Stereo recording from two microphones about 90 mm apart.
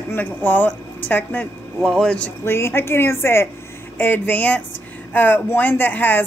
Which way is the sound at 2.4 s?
25° left (ahead or behind).